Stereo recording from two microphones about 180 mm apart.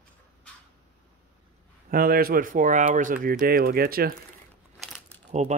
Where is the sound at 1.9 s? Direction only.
55° right (ahead or behind).